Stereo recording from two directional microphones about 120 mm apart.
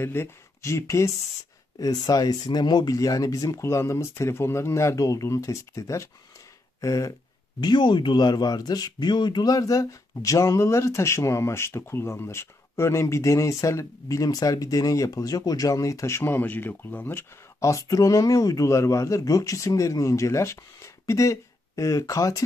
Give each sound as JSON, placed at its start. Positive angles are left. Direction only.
{"t": 0.0, "sound": "speech", "side_deg": 20}
{"t": 7.6, "sound": "speech", "side_deg": 40}